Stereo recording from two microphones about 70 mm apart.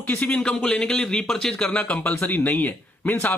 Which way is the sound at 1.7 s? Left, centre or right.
Centre.